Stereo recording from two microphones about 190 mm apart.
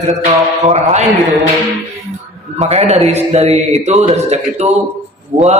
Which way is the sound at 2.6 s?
35° right (ahead or behind).